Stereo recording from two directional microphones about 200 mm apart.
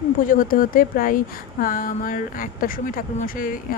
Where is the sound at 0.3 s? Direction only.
45° left (ahead or behind).